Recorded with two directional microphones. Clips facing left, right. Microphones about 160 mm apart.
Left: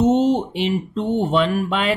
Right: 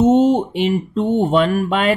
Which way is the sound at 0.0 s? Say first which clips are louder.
Right 3 dB; 50° right (ahead or behind).